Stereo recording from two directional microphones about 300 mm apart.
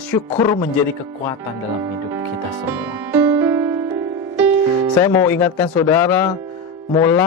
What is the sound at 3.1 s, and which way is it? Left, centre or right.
Music, centre.